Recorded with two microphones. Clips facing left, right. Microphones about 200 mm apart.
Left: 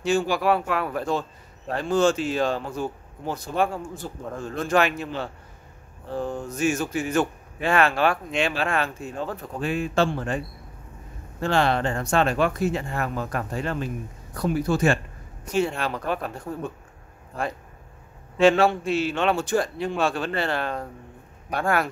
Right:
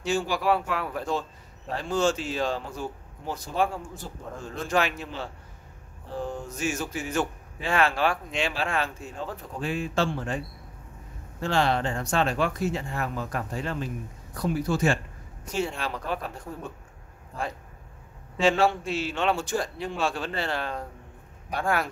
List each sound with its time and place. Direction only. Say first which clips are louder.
0.0 s a man's voice: left 4 dB; 60° left (ahead or behind)
11.4 s a man's voice: left 3 dB; 60° left (ahead or behind)
18.4 s a man's voice: left 5 dB; 60° left (ahead or behind)